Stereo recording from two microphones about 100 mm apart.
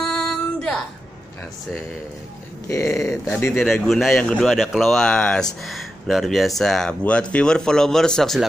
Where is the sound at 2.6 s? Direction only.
30° left (ahead or behind).